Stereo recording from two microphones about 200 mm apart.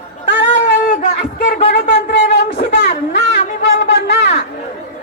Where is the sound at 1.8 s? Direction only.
60° left (ahead or behind).